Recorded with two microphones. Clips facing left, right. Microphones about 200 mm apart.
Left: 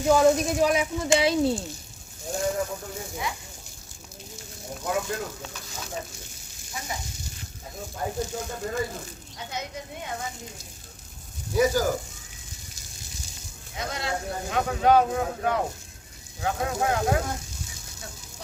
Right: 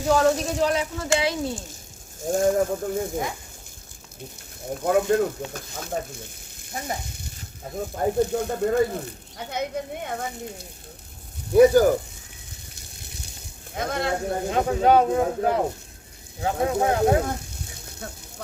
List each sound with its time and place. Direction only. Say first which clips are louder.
0.1 s speech: left 1 dB; 10° left (ahead or behind)
2.2 s speech: right 7 dB; 50° right (ahead or behind)
4.8 s speech: right 9 dB; 60° right (ahead or behind)
5.5 s frying: right 6 dB; 55° right (ahead or behind)
7.8 s speech: right 8 dB; 60° right (ahead or behind)
12.7 s water: right 1 dB; 60° right (ahead or behind)
13.7 s speech: right 5 dB; 55° right (ahead or behind)
14.5 s speech: right 2 dB; 30° right (ahead or behind)
17.2 s a sound: right 3 dB; 60° right (ahead or behind)